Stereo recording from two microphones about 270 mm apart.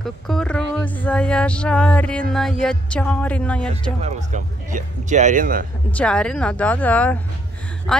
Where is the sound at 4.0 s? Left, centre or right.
Right.